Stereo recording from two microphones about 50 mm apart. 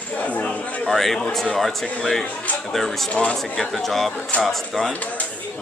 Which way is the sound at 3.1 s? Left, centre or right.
Centre.